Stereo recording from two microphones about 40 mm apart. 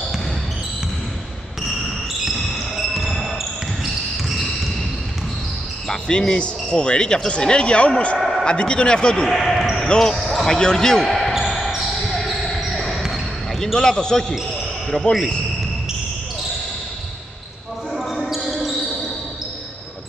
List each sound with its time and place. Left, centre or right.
2.2 s basketball bounce: centre
5.9 s speech: centre
8.2 s a sound: centre
8.5 s speech: left
9.3 s basketball bounce: centre
9.8 s speech: centre
11.1 s basketball bounce: centre
13.7 s speech: centre
17.9 s basketball bounce: centre